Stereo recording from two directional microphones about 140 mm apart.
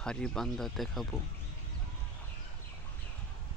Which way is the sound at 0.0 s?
5° left (ahead or behind).